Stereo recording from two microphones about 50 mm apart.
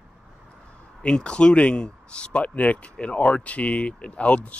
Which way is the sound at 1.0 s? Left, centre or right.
Centre.